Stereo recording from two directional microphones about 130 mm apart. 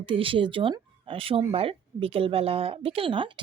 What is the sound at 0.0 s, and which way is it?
Speech, 40° right (ahead or behind).